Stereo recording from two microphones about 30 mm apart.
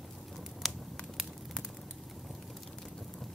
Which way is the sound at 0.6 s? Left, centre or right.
Centre.